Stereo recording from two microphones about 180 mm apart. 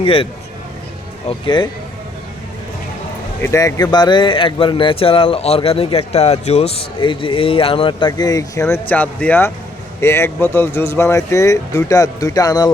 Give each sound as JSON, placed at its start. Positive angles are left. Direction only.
{"t": 0.0, "sound": "a man's voice", "side_deg": 30}
{"t": 1.3, "sound": "a man's voice", "side_deg": 25}
{"t": 3.4, "sound": "a man's voice", "side_deg": 15}